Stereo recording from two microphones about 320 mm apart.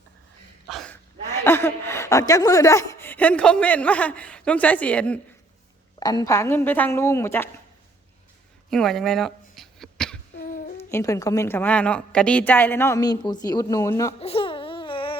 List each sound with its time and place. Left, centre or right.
0.7 s a woman's voice: centre
8.7 s throat clearing: centre
10.3 s a sound: left
10.8 s a woman's voice: centre